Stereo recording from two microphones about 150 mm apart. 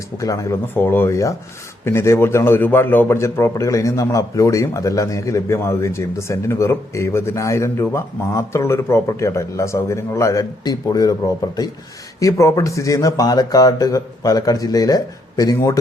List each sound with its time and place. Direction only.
0.2 s a man's voice: 20° left (ahead or behind)
12.2 s a man's voice: 20° left (ahead or behind)